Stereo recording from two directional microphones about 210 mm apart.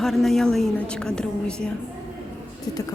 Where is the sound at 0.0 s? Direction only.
Centre (ahead or behind).